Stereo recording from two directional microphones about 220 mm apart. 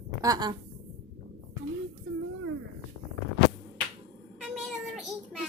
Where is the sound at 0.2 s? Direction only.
15° right (ahead or behind).